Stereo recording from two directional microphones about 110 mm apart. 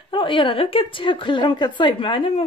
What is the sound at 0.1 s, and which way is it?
A woman's voice, 50° left (ahead or behind).